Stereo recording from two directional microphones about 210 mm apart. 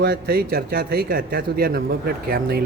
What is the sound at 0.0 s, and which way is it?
Speech, 45° right (ahead or behind).